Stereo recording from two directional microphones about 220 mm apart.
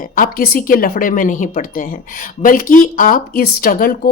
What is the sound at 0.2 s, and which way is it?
Speech, 40° left (ahead or behind).